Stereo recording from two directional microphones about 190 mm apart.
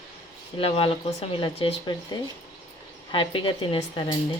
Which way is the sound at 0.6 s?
30° left (ahead or behind).